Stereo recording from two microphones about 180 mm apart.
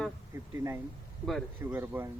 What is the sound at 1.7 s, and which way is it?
Speech, 10° right (ahead or behind).